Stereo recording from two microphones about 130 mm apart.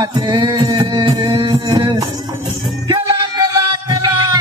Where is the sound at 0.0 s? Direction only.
35° right (ahead or behind).